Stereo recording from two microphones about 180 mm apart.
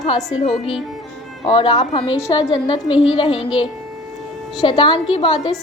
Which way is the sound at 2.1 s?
20° left (ahead or behind).